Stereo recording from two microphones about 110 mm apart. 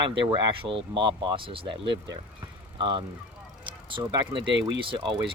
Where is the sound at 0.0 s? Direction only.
50° right (ahead or behind).